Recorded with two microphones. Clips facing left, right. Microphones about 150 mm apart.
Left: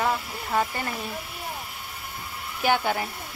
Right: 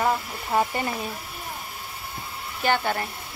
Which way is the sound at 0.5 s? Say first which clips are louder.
Right 3 dB; 15° right (ahead or behind).